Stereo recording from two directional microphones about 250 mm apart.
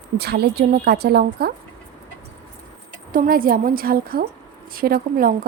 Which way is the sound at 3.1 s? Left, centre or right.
Right.